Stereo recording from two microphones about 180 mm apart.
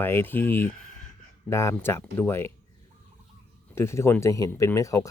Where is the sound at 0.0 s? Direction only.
10° left (ahead or behind).